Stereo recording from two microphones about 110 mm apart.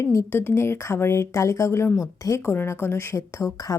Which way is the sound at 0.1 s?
25° left (ahead or behind).